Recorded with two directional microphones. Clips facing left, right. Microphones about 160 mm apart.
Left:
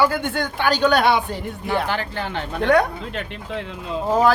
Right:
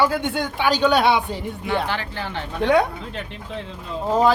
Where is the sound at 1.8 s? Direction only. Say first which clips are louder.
Left 2 dB; 45° left (ahead or behind).